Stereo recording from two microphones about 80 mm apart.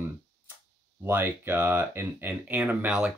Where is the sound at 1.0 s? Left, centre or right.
Right.